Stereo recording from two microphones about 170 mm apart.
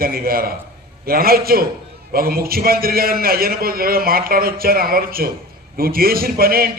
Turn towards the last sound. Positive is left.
turn(degrees=-60)  # may be behind; listen again after turning